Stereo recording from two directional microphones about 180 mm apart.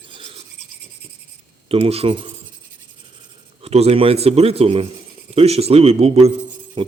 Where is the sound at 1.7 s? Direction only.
35° right (ahead or behind).